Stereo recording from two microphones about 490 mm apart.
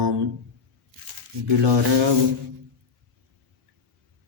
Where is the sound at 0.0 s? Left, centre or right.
Right.